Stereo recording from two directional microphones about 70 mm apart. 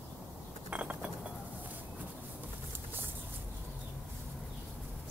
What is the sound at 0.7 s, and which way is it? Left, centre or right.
Chink, centre.